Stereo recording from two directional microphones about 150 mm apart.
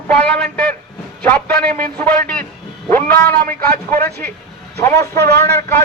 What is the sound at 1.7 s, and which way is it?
Speech, 65° right (ahead or behind).